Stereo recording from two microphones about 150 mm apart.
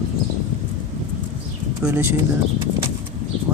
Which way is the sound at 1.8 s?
15° right (ahead or behind).